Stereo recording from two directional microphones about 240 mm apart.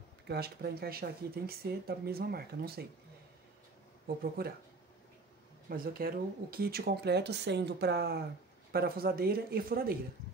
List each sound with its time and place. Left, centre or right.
0.3 s speech: right
4.2 s speech: right
5.7 s speech: right